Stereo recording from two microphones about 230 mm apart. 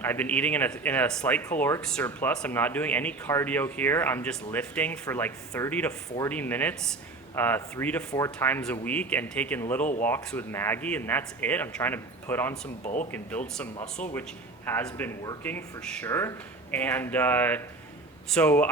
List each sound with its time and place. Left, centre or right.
0.0 s speech: centre
12.8 s speech: left
13.1 s speech: centre